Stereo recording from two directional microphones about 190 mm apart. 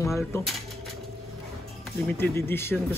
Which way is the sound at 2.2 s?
10° left (ahead or behind).